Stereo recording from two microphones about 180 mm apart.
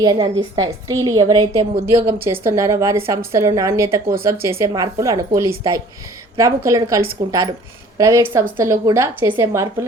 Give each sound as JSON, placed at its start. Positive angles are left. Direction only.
{"t": 0.0, "sound": "a woman's voice", "side_deg": -25}